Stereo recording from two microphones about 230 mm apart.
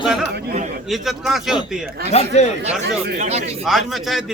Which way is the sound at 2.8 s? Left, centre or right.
Right.